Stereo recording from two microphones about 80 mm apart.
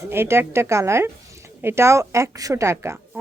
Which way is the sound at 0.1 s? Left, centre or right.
Right.